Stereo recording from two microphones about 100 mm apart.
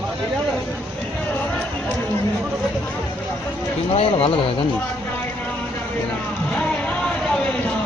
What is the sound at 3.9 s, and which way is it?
Speech, 75° left (ahead or behind).